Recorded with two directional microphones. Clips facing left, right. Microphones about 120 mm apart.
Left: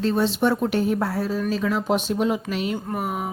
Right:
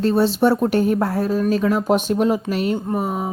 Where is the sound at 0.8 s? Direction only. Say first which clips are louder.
Right 4 dB; 50° right (ahead or behind).